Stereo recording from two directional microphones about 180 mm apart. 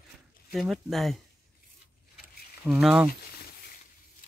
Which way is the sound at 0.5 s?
Centre (ahead or behind).